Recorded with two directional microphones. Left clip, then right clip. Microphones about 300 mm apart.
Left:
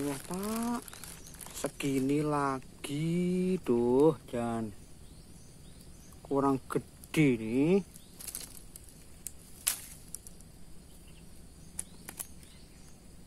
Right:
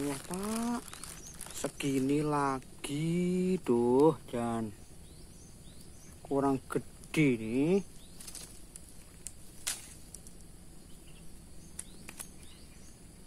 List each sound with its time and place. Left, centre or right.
0.3 s speech: centre
6.2 s speech: centre
11.7 s a sound: centre